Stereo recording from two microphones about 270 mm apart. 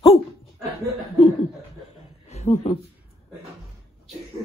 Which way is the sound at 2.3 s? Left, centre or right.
Left.